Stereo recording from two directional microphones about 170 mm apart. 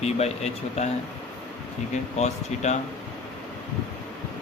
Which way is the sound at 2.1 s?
40° left (ahead or behind).